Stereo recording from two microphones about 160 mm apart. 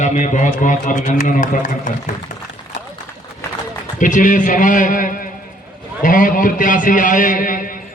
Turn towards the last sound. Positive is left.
turn(degrees=60)  # may be behind; listen again after turning